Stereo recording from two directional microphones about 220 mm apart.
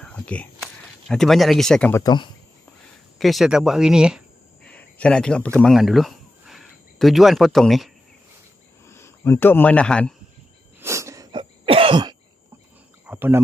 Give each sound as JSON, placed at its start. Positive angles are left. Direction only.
{"t": 0.0, "sound": "speech", "side_deg": 5}
{"t": 3.2, "sound": "speech", "side_deg": 0}
{"t": 8.8, "sound": "a man's voice", "side_deg": 10}
{"t": 10.8, "sound": "throat clearing", "side_deg": -15}
{"t": 13.0, "sound": "cricket", "side_deg": -10}